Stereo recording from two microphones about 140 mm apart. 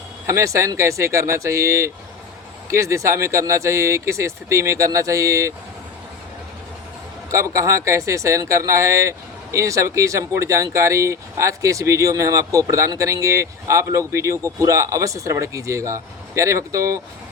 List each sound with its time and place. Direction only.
0.3 s speech: 20° right (ahead or behind)
7.3 s speech: 20° right (ahead or behind)